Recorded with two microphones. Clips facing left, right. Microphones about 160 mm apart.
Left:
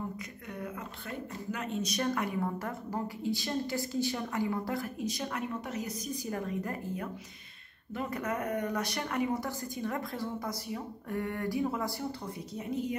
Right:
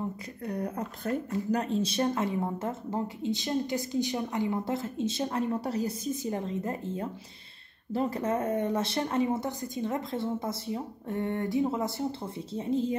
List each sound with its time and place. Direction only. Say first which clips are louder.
0.5 s speech: right 8 dB; 40° right (ahead or behind)